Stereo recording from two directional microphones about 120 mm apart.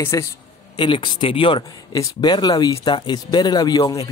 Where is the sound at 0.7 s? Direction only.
40° left (ahead or behind).